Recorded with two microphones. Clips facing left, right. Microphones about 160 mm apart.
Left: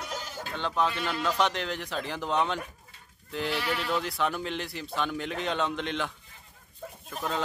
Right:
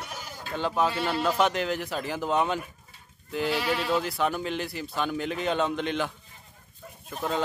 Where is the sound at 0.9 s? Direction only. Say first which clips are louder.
Right 4 dB; 30° right (ahead or behind).